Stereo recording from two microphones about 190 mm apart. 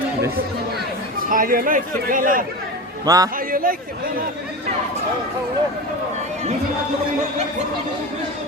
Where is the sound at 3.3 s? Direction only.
50° right (ahead or behind).